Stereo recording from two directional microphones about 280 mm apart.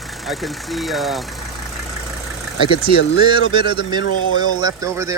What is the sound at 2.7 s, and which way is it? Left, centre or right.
Speech, left.